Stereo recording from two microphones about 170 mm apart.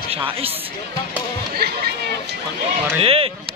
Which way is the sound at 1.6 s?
70° right (ahead or behind).